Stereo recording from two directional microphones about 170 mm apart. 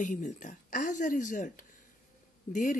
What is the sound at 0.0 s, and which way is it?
Speech, 45° left (ahead or behind).